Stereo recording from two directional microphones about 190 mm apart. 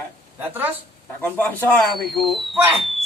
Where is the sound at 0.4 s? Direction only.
10° right (ahead or behind).